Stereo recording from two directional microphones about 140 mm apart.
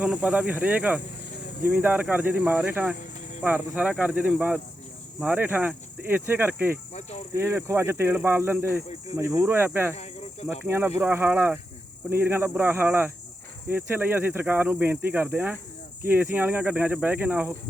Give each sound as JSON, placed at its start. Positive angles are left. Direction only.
{"t": 0.0, "sound": "speech", "side_deg": -10}